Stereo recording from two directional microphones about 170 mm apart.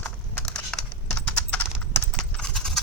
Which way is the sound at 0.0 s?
5° left (ahead or behind).